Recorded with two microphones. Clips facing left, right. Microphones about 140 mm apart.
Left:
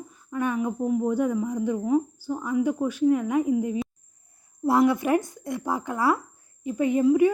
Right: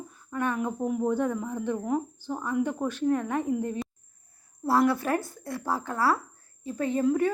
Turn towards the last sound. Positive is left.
turn(degrees=10)  # may be behind; listen again after turning